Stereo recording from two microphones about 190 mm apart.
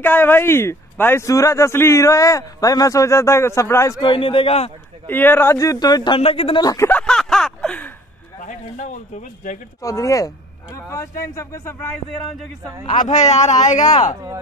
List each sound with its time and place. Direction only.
0.0 s speech: 10° left (ahead or behind)
4.0 s speech: 25° left (ahead or behind)
5.0 s speech: 10° left (ahead or behind)
6.9 s a sound: 5° left (ahead or behind)
8.4 s speech: 40° left (ahead or behind)
9.8 s speech: 15° left (ahead or behind); by 12.7 s centre (ahead or behind)
12.8 s speech: 35° left (ahead or behind)